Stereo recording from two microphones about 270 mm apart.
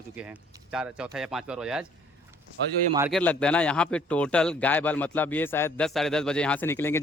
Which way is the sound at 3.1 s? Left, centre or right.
Centre.